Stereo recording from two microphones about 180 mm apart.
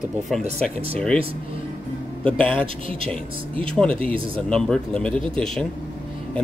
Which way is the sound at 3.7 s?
5° left (ahead or behind).